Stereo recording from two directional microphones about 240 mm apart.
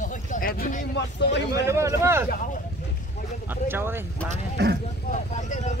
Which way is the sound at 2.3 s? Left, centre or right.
Left.